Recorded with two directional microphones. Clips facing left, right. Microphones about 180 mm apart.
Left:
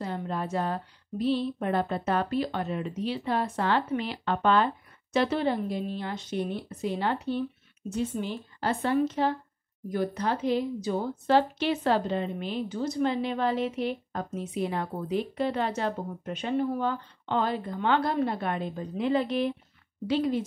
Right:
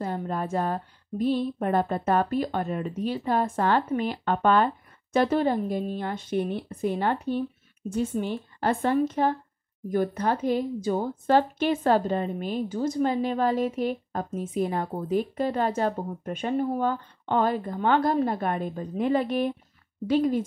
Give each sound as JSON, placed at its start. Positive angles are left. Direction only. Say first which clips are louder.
{"t": 0.0, "sound": "a woman's voice", "louder": "right 3 dB", "side_deg": -45}